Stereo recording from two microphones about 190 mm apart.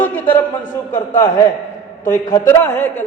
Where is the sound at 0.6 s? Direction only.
45° left (ahead or behind).